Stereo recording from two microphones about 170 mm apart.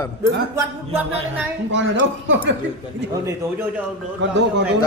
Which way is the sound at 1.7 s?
90° right.